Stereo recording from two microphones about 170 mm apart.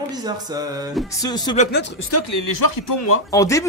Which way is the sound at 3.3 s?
20° left (ahead or behind).